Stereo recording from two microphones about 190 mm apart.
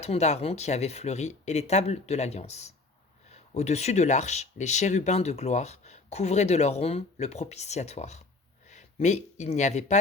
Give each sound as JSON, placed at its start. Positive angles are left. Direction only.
{"t": 0.0, "sound": "speech", "side_deg": 35}